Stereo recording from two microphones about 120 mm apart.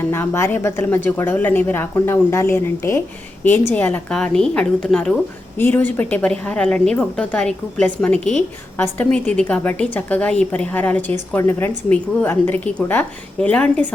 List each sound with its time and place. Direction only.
0.0 s a woman's voice: 20° left (ahead or behind)